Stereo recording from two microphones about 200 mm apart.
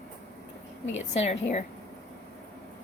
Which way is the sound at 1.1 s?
35° left (ahead or behind).